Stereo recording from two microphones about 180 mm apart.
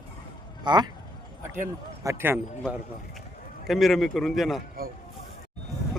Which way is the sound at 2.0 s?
15° right (ahead or behind).